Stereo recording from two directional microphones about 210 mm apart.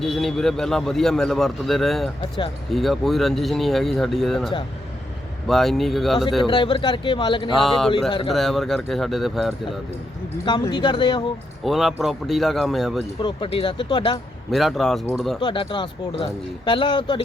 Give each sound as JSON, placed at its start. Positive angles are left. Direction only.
{"t": 0.0, "sound": "a man's voice", "side_deg": 0}
{"t": 6.4, "sound": "speech", "side_deg": 25}
{"t": 7.5, "sound": "a man's voice", "side_deg": 0}
{"t": 10.4, "sound": "speech", "side_deg": 20}
{"t": 11.6, "sound": "a man's voice", "side_deg": 0}
{"t": 13.1, "sound": "speech", "side_deg": 25}
{"t": 14.5, "sound": "a man's voice", "side_deg": 0}
{"t": 15.4, "sound": "speech", "side_deg": 20}